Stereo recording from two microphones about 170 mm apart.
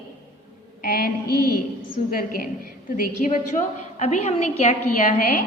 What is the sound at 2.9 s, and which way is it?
A woman's voice, 50° left (ahead or behind).